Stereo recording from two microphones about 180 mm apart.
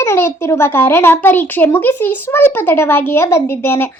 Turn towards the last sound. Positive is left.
turn(degrees=10)  # may be behind; listen again after turning